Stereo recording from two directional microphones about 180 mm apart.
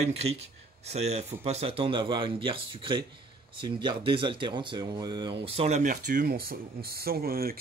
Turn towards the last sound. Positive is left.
turn(degrees=-55)  # may be behind; listen again after turning